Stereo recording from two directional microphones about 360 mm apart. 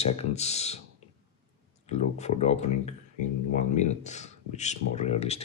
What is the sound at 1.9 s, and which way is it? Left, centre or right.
Speech, centre.